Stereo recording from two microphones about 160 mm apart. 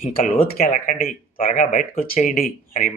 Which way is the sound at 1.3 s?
45° left (ahead or behind).